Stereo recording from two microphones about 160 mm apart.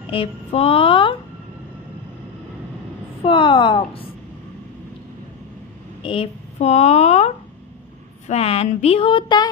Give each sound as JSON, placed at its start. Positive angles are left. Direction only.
{"t": 0.0, "sound": "speech", "side_deg": 35}
{"t": 3.3, "sound": "speech", "side_deg": 30}
{"t": 6.0, "sound": "speech", "side_deg": 35}